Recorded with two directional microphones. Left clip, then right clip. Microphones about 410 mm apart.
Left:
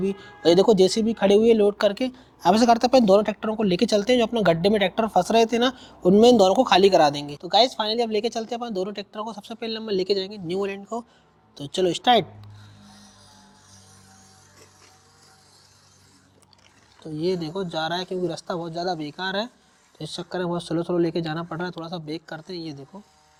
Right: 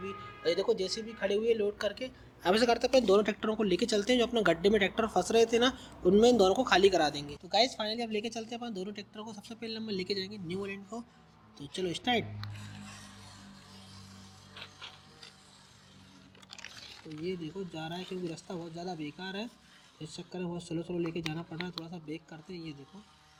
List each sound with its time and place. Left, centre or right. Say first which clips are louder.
0.0 s speech: left 12 dB; left
2.4 s speech: left 9 dB; left
3.1 s speech: left 8 dB; left
17.7 s speech: left 14 dB; left